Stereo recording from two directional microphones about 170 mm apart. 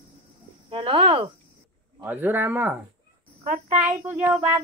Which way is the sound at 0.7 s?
30° right (ahead or behind).